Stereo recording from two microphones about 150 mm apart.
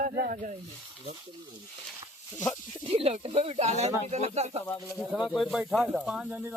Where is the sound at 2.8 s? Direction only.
40° right (ahead or behind).